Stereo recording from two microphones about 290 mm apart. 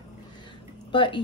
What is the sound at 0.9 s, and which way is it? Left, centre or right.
Speech, centre.